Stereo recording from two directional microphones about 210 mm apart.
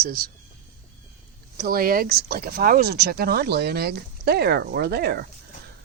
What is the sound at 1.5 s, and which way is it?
Speech, 45° right (ahead or behind).